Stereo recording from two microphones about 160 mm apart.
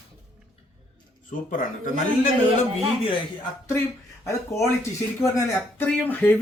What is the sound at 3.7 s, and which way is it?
Speech, 15° left (ahead or behind).